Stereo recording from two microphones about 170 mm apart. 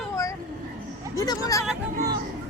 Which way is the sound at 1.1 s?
20° left (ahead or behind).